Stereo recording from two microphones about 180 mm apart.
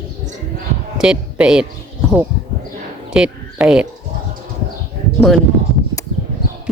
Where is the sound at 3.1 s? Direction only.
5° right (ahead or behind).